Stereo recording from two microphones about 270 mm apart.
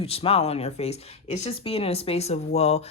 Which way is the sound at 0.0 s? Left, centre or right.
Left.